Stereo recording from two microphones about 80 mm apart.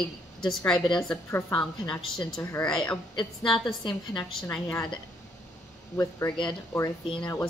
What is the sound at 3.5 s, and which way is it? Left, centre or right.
Speech, left.